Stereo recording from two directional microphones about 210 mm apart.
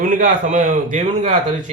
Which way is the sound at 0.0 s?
40° right (ahead or behind).